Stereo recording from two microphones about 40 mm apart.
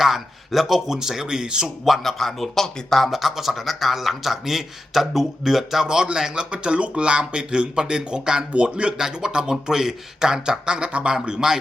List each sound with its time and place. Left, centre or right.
0.0 s speech: centre
1.8 s speech: centre
3.1 s speech: centre
5.9 s speech: centre